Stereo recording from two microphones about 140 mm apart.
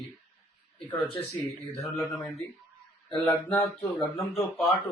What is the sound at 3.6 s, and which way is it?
Speech, centre (ahead or behind).